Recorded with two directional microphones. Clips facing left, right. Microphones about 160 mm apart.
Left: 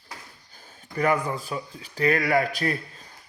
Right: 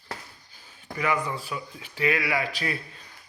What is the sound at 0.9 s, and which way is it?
A man's voice, 45° left (ahead or behind).